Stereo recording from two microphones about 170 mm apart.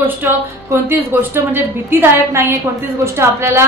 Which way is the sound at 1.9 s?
15° right (ahead or behind).